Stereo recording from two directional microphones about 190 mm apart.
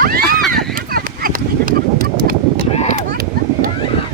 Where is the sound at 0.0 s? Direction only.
50° right (ahead or behind).